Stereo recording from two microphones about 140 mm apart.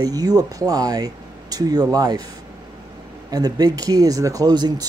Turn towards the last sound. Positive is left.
turn(degrees=-30)  # may be behind; listen again after turning